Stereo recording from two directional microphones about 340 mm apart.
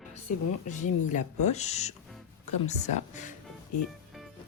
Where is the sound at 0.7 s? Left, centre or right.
Left.